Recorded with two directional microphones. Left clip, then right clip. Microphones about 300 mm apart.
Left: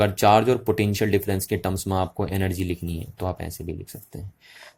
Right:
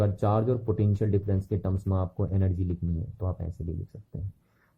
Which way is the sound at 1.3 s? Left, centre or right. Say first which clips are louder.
Left 7 dB; left.